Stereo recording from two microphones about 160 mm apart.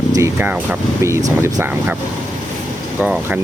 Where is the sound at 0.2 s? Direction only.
10° right (ahead or behind).